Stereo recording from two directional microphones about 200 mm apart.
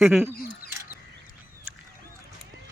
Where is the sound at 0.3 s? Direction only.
45° left (ahead or behind).